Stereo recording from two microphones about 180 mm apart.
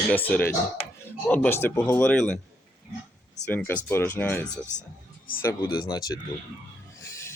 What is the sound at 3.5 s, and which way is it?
Speech, 10° left (ahead or behind).